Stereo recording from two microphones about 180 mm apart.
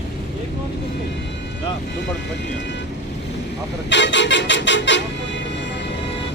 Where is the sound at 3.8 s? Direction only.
90° left.